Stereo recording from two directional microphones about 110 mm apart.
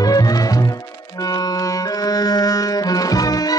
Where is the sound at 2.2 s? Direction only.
35° left (ahead or behind).